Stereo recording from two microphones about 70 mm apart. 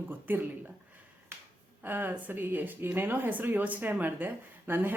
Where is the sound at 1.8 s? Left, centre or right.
Right.